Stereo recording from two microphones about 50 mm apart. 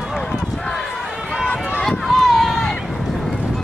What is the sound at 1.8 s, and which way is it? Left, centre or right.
Run, centre.